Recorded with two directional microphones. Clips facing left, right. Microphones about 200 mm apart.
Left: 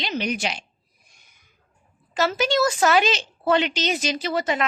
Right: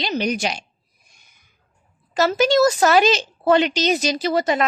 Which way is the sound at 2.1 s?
40° right (ahead or behind).